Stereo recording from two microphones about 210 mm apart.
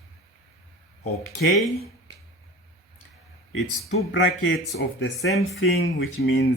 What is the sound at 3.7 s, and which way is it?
Speech, 70° left (ahead or behind).